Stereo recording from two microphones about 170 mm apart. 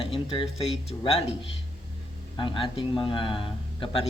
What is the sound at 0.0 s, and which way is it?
Speech, 30° left (ahead or behind).